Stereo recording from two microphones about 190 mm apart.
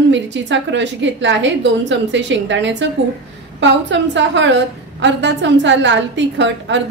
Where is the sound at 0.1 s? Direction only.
70° right (ahead or behind).